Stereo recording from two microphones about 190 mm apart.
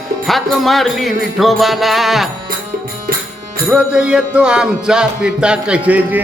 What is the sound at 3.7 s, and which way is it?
Music, 5° right (ahead or behind).